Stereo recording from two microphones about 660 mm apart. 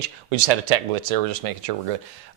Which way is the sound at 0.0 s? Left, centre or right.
Right.